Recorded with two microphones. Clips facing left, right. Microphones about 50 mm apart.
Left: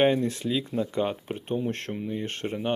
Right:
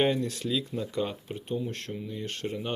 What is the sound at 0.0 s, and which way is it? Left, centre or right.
Speech, left.